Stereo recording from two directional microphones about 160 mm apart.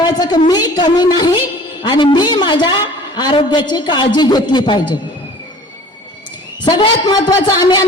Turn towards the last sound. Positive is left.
turn(degrees=25)  # may be behind; listen again after turning